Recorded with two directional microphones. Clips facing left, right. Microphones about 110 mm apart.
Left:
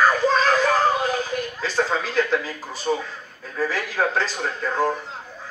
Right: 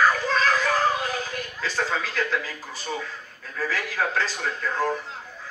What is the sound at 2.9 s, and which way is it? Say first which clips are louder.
Speech: left 8 dB; 35° left (ahead or behind).